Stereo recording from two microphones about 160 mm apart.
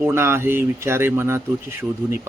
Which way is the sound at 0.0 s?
15° right (ahead or behind).